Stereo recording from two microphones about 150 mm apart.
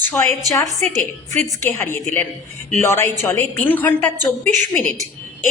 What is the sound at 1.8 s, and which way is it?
A woman's voice, 15° left (ahead or behind).